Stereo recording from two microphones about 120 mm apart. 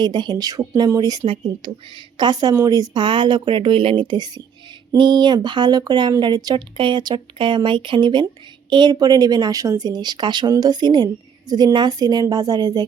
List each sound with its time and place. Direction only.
0.0 s speech: 40° right (ahead or behind)